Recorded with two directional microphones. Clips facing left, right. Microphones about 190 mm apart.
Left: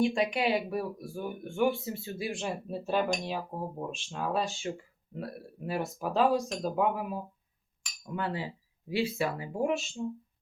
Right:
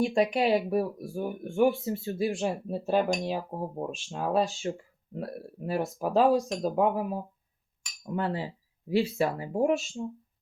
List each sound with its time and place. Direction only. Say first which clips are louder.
0.0 s speech: right 3 dB; 40° right (ahead or behind)